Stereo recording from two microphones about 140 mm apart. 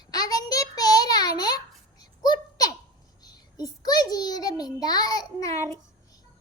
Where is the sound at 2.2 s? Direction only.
30° left (ahead or behind).